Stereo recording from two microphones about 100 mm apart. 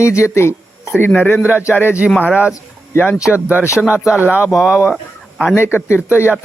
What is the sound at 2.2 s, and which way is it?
Speech, 15° right (ahead or behind).